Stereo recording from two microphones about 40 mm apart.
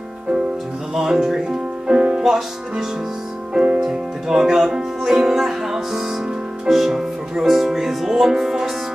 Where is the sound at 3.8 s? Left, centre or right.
Centre.